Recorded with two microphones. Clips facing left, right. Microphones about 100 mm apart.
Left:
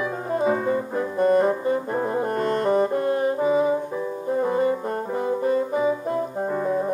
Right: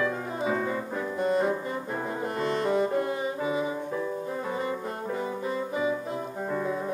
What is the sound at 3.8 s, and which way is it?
Music, 15° left (ahead or behind).